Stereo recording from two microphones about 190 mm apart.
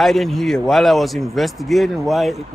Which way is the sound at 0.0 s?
Centre (ahead or behind).